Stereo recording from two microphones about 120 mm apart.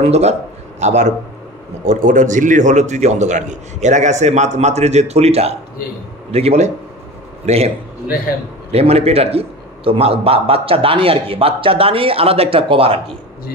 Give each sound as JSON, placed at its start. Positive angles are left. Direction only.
{"t": 0.0, "sound": "a man's voice", "side_deg": -65}
{"t": 1.9, "sound": "a man's voice", "side_deg": -90}
{"t": 8.7, "sound": "a man's voice", "side_deg": -60}